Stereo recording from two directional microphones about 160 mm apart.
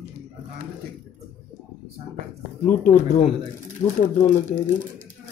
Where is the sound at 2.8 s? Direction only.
50° left (ahead or behind).